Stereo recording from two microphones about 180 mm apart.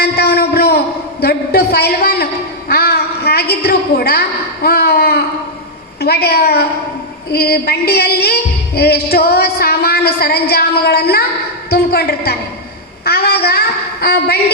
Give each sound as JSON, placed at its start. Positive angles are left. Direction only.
{"t": 0.0, "sound": "a sound", "side_deg": 60}
{"t": 1.2, "sound": "a woman's voice", "side_deg": 60}
{"t": 6.0, "sound": "music", "side_deg": 60}